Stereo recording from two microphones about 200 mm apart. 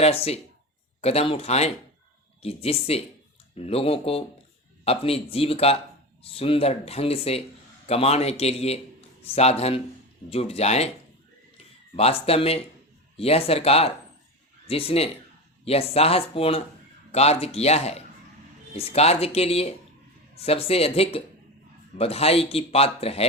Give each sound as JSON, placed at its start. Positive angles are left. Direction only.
{"t": 0.0, "sound": "a man's voice", "side_deg": 30}
{"t": 11.9, "sound": "speech", "side_deg": 30}